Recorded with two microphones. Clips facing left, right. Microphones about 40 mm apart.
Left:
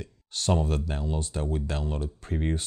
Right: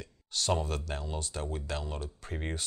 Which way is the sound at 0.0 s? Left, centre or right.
Left.